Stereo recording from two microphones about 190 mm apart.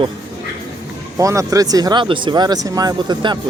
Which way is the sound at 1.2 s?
15° right (ahead or behind).